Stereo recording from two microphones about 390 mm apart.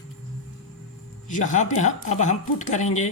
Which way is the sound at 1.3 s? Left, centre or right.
Centre.